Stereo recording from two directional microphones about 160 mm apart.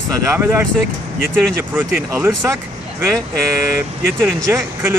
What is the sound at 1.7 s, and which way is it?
Speech, 10° right (ahead or behind).